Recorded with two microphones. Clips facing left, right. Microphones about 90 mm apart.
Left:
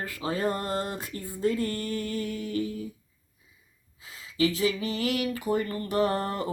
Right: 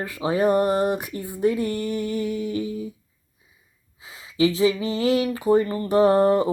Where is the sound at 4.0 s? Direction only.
20° right (ahead or behind).